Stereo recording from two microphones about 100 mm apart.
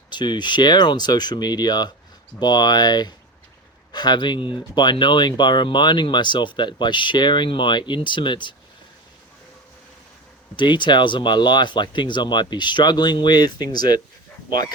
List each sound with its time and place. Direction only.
0.1 s speech: 50° left (ahead or behind)
10.6 s speech: 50° left (ahead or behind)